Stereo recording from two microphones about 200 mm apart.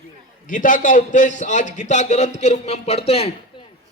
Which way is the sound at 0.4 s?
40° left (ahead or behind).